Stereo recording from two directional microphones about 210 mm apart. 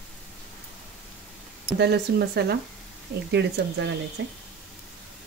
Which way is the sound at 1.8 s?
50° right (ahead or behind).